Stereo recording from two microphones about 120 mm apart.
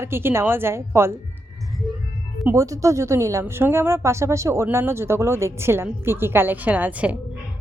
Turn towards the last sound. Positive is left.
turn(degrees=-10)  # may be behind; listen again after turning